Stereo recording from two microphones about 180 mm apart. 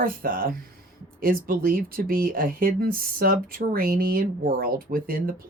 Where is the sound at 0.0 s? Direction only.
55° right (ahead or behind).